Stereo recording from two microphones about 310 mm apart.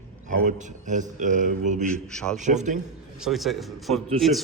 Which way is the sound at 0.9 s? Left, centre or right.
Right.